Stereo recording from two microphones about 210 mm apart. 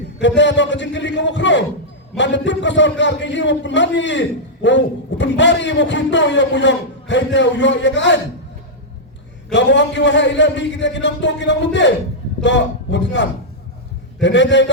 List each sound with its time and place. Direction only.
0.2 s a man's voice: 60° left (ahead or behind)
9.5 s a man's voice: 60° left (ahead or behind)